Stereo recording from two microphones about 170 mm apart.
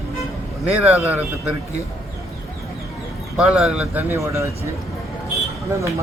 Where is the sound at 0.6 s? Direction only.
10° right (ahead or behind).